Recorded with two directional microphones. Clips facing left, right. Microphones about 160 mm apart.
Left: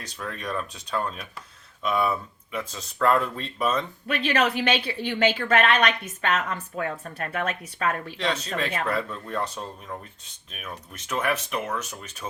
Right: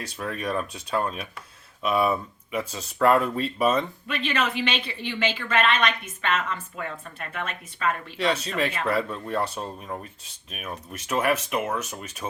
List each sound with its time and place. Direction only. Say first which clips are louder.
0.2 s speech: right 3 dB; 10° right (ahead or behind)
4.3 s speech: left 4 dB; 45° left (ahead or behind)
8.2 s speech: right 4 dB; 5° right (ahead or behind)